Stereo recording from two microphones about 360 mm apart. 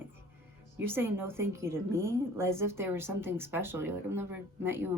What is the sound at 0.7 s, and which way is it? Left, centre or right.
A woman's voice, centre.